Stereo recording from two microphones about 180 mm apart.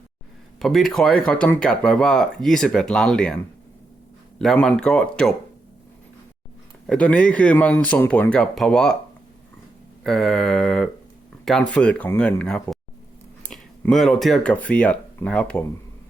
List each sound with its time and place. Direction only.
0.6 s speech: centre (ahead or behind)
4.4 s speech: 5° left (ahead or behind)
6.8 s speech: 5° left (ahead or behind)
10.0 s speech: centre (ahead or behind)